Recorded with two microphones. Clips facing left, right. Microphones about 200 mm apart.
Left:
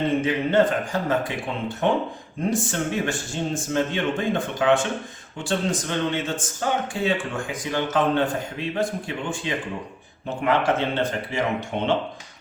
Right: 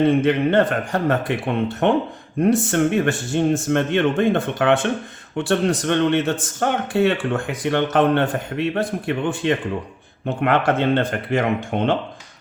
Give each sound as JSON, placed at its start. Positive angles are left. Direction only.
{"t": 0.3, "sound": "speech", "side_deg": -60}